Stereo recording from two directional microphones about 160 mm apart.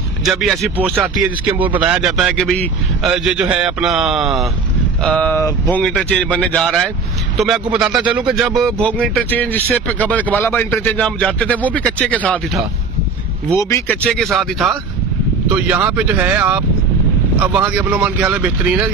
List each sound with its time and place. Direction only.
0.2 s a man's voice: centre (ahead or behind)
3.1 s a man's voice: 5° right (ahead or behind); by 11.9 s 10° left (ahead or behind)
13.6 s speech: 20° left (ahead or behind)
14.0 s a man's voice: centre (ahead or behind)